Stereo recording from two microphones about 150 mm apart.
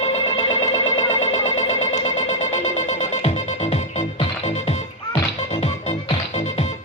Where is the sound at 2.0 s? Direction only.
45° left (ahead or behind).